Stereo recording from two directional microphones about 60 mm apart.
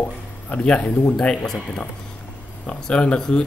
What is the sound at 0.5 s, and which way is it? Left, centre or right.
Speech, centre.